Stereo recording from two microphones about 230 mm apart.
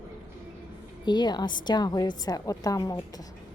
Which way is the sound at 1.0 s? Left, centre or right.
Centre.